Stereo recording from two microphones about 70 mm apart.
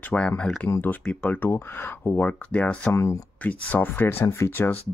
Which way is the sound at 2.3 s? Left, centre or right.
Centre.